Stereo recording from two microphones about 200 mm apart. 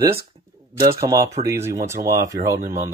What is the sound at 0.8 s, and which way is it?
Speech, 15° right (ahead or behind).